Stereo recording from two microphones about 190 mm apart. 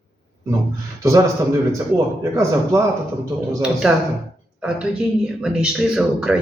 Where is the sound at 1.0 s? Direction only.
15° right (ahead or behind).